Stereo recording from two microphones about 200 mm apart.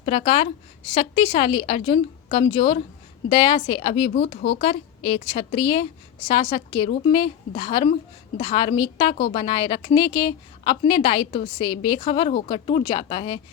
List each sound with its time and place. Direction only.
0.0 s a woman's voice: 30° left (ahead or behind)